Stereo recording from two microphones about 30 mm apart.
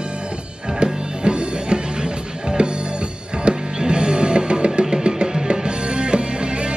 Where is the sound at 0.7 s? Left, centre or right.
Right.